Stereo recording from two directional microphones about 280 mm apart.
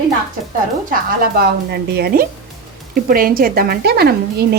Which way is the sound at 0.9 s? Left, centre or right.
Right.